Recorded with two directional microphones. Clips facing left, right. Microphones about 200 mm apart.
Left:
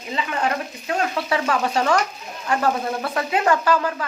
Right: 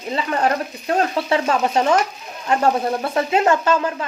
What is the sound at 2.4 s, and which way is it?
Speech, 25° right (ahead or behind).